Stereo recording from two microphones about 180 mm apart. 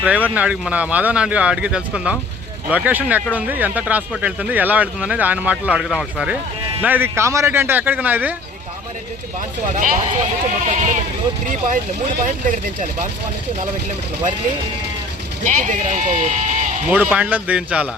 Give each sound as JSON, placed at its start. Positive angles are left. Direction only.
{"t": 0.0, "sound": "speech", "side_deg": -5}
{"t": 9.7, "sound": "speech", "side_deg": -45}
{"t": 12.2, "sound": "speech", "side_deg": -45}
{"t": 15.4, "sound": "speech", "side_deg": -45}
{"t": 16.9, "sound": "speech", "side_deg": -10}